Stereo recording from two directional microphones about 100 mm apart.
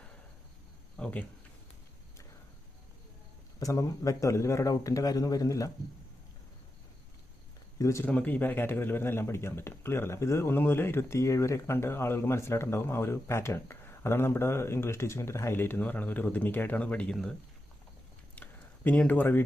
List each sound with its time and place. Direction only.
0.9 s a sound: 15° left (ahead or behind)
3.6 s speech: 35° left (ahead or behind)
7.8 s speech: 30° left (ahead or behind)
8.0 s speech: 15° left (ahead or behind)
18.4 s a sound: 15° left (ahead or behind)
18.9 s speech: 15° left (ahead or behind)